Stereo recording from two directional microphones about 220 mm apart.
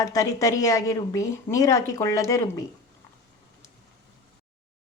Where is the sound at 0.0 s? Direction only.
15° left (ahead or behind).